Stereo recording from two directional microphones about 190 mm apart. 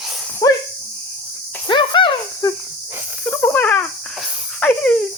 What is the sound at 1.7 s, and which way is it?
Snake, 25° left (ahead or behind).